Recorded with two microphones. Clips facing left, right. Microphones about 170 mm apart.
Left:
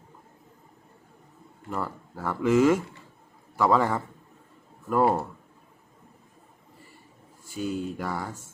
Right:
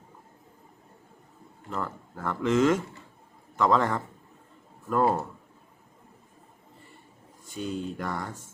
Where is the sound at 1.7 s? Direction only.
10° left (ahead or behind).